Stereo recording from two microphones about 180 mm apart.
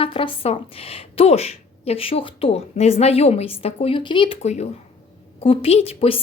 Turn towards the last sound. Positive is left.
turn(degrees=30)  # may be behind; listen again after turning